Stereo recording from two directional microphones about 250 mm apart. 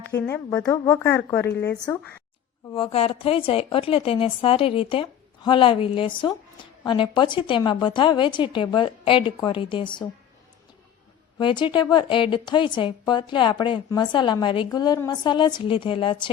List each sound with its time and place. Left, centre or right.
0.0 s a woman's voice: centre
2.7 s a woman's voice: left
11.3 s a woman's voice: centre